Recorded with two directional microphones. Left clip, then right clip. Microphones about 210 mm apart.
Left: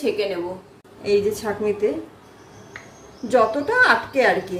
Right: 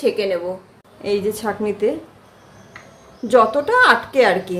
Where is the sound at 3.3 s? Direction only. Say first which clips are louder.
Right 4 dB; 50° right (ahead or behind).